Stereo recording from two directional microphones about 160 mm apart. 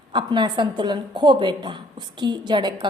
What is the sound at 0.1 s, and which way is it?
Speech, 30° right (ahead or behind).